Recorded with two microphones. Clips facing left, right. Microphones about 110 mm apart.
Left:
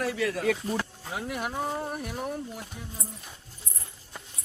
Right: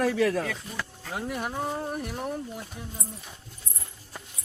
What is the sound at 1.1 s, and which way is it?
Speech, centre (ahead or behind).